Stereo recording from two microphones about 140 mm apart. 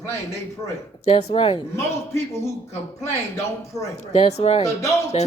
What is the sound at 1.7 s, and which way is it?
Speech, 20° left (ahead or behind).